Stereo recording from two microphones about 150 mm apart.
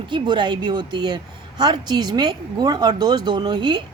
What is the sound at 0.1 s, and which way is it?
A woman's voice, 30° right (ahead or behind).